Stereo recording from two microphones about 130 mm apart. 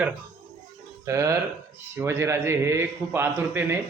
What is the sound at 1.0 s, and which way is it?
A man's voice, 20° right (ahead or behind).